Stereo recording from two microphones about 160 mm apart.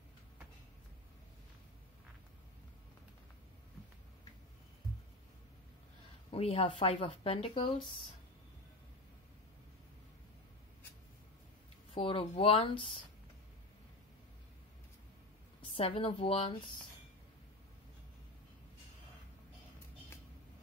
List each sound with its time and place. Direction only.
6.3 s speech: 35° left (ahead or behind)
11.9 s speech: 35° left (ahead or behind)
15.7 s speech: 35° left (ahead or behind)